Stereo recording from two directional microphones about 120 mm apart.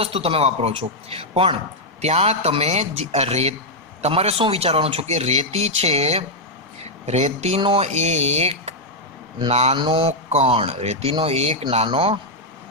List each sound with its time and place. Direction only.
0.0 s speech: 55° right (ahead or behind)
2.0 s speech: 65° right (ahead or behind)
7.0 s speech: 70° right (ahead or behind)
9.7 s speech: 50° right (ahead or behind)